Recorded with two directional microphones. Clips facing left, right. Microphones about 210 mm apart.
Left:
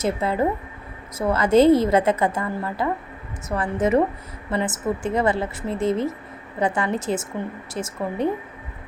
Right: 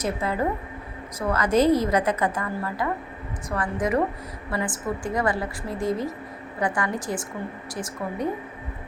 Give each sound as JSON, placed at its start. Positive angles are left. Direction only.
{"t": 0.0, "sound": "a woman's voice", "side_deg": 25}